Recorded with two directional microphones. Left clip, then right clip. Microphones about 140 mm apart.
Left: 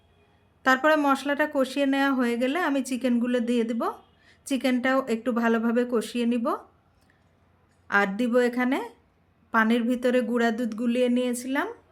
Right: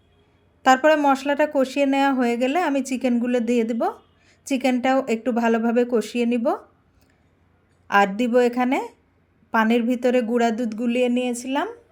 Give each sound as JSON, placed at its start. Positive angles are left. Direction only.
{"t": 0.6, "sound": "speech", "side_deg": -20}
{"t": 7.9, "sound": "speech", "side_deg": -20}